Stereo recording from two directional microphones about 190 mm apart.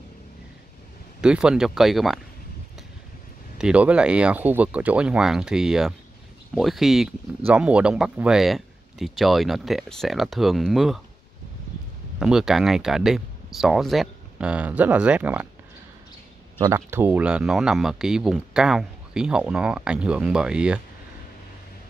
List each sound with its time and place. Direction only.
1.2 s speech: 5° right (ahead or behind)
3.5 s speech: 5° right (ahead or behind)
12.2 s speech: centre (ahead or behind)
16.6 s speech: 10° right (ahead or behind)